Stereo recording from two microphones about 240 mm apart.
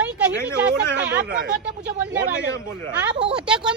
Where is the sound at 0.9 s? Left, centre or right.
Right.